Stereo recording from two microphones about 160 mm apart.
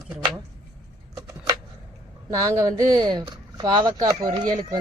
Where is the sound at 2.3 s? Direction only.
20° right (ahead or behind).